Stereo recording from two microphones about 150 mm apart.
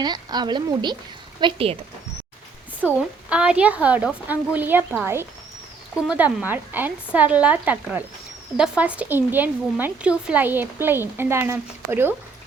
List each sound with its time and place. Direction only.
0.0 s speech: 30° right (ahead or behind)
2.8 s speech: 5° right (ahead or behind)
6.1 s speech: 10° right (ahead or behind)